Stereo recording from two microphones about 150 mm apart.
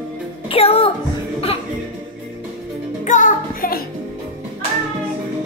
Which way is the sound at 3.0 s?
55° left (ahead or behind).